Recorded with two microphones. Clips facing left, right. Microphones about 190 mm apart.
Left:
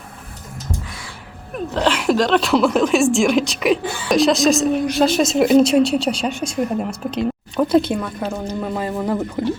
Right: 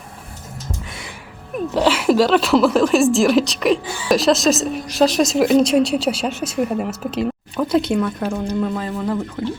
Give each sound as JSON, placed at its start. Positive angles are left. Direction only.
{"t": 1.7, "sound": "a woman's voice", "side_deg": -10}